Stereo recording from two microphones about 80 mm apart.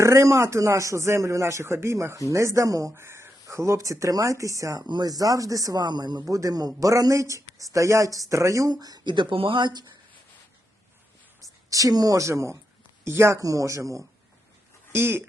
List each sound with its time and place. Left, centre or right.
0.0 s speech: right
2.9 s speech: right
4.8 s speech: right
6.2 s speech: right
8.7 s speech: right
9.1 s speech: right
11.7 s speech: right
14.9 s speech: right